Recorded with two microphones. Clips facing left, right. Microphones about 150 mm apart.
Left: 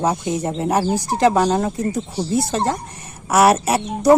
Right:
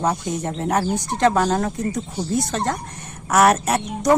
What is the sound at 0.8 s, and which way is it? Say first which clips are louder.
Speech: left 3 dB; 35° left (ahead or behind).